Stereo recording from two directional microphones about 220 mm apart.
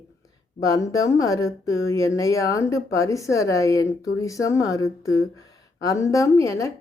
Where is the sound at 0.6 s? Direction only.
15° left (ahead or behind).